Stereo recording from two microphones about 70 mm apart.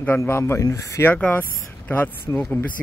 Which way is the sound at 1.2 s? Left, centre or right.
Left.